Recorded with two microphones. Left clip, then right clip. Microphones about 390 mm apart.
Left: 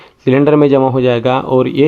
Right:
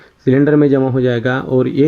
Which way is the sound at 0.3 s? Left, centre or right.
Left.